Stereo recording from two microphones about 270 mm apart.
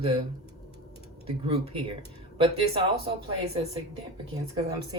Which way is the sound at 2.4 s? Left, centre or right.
Centre.